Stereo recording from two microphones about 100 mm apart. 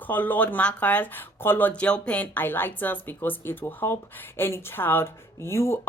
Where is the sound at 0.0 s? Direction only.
20° left (ahead or behind).